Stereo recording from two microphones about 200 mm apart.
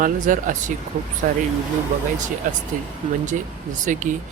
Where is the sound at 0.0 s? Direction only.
40° right (ahead or behind).